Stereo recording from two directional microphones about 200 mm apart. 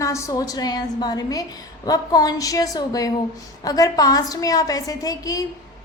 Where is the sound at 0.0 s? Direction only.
15° left (ahead or behind).